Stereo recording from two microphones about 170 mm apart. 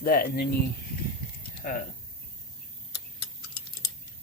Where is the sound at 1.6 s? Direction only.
55° left (ahead or behind).